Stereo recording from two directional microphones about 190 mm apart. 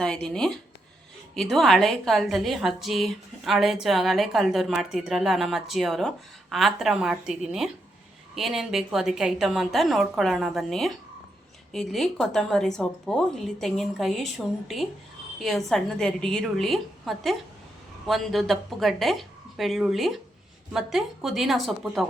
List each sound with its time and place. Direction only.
0.0 s a woman's voice: 5° left (ahead or behind)